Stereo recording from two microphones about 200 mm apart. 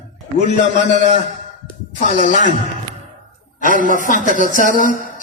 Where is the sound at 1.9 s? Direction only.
35° left (ahead or behind).